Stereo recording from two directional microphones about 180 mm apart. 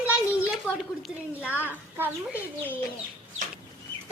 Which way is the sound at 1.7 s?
10° right (ahead or behind).